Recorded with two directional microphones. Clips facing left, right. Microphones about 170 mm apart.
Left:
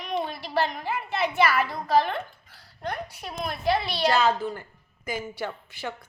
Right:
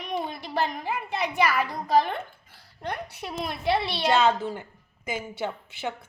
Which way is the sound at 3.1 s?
25° right (ahead or behind).